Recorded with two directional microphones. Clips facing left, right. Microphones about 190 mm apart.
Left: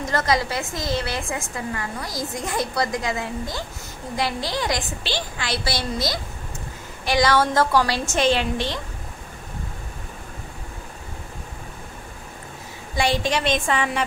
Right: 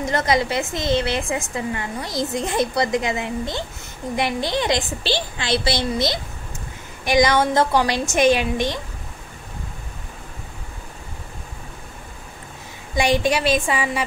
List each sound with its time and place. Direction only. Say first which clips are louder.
0.1 s a woman's voice: right 2 dB; 20° right (ahead or behind)
12.9 s a woman's voice: right 3 dB; 15° right (ahead or behind)